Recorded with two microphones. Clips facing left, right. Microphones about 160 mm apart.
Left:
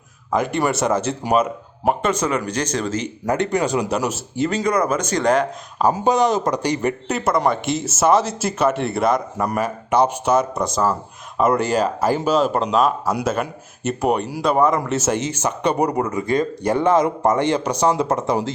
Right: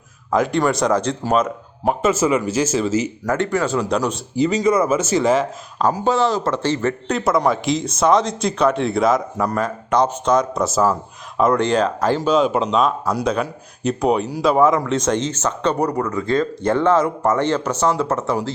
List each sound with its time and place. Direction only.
0.3 s speech: centre (ahead or behind)
3.2 s speech: 20° left (ahead or behind); by 5.5 s 5° right (ahead or behind)
5.9 s speech: 15° left (ahead or behind)
7.2 s speech: centre (ahead or behind); by 18.5 s 15° left (ahead or behind)